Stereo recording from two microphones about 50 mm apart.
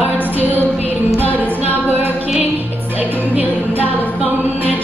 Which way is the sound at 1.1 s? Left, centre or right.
Left.